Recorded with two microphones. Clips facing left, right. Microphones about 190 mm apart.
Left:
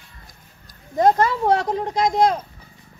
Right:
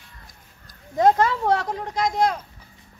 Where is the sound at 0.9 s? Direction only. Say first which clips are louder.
Left 1 dB; centre (ahead or behind).